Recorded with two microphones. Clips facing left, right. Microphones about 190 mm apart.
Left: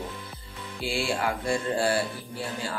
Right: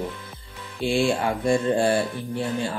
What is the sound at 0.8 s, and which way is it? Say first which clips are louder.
Speech: right 6 dB; 20° right (ahead or behind).